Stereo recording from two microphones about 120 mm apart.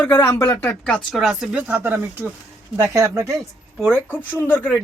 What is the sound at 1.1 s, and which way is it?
Speech, centre (ahead or behind).